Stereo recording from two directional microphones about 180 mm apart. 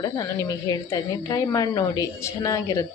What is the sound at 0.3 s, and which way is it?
A woman's voice, 20° left (ahead or behind).